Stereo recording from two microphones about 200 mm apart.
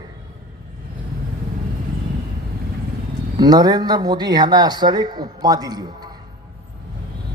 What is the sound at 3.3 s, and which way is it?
A man's voice, 20° right (ahead or behind).